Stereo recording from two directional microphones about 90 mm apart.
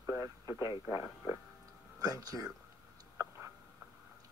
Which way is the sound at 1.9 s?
40° right (ahead or behind).